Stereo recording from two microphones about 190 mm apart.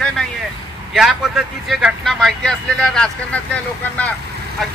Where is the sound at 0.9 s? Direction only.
Centre (ahead or behind).